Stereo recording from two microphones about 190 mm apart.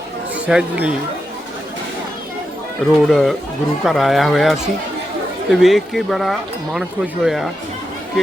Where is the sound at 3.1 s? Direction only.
Centre (ahead or behind).